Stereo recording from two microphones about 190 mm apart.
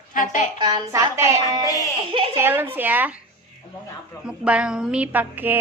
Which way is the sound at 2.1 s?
25° right (ahead or behind).